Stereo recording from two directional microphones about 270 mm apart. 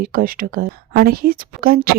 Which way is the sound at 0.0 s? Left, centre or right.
Right.